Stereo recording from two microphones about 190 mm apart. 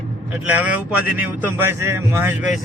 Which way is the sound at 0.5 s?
10° right (ahead or behind).